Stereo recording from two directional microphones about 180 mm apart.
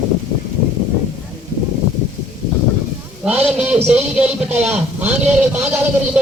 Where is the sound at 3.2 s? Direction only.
5° right (ahead or behind).